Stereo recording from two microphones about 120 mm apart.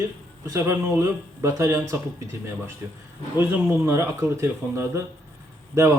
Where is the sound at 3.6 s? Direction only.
20° right (ahead or behind).